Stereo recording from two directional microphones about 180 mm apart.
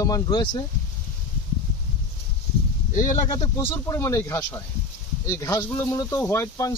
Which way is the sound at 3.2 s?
20° left (ahead or behind).